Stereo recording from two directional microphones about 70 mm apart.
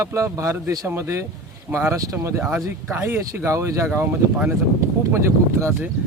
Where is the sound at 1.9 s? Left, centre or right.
Right.